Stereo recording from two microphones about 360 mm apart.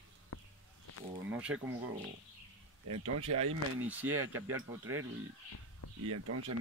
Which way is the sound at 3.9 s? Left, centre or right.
Centre.